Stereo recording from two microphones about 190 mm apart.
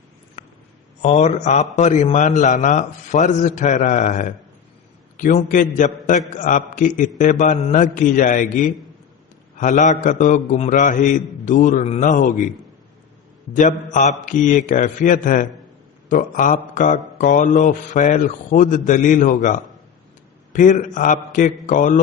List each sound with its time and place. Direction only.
0.4 s a sound: 35° left (ahead or behind)
1.0 s a man's voice: 40° left (ahead or behind)
13.5 s speech: 40° left (ahead or behind)